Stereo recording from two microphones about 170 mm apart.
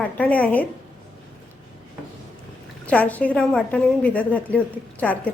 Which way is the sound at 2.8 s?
10° left (ahead or behind).